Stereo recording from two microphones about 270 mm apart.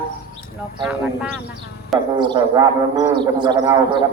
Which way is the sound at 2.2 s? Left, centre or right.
Centre.